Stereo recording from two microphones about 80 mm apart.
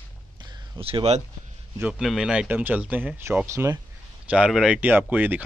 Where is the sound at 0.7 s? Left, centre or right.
Right.